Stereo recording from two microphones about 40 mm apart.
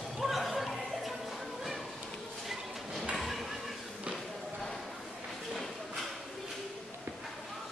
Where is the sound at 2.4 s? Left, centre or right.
Centre.